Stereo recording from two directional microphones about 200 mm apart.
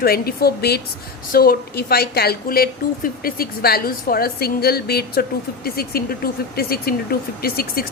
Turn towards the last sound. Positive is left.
turn(degrees=50)  # may be behind; listen again after turning